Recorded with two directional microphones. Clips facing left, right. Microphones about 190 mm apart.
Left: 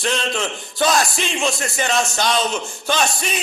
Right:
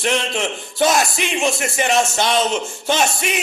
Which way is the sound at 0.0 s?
20° right (ahead or behind).